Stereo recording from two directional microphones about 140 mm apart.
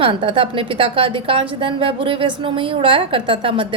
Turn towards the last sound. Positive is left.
turn(degrees=-40)  # may be behind; listen again after turning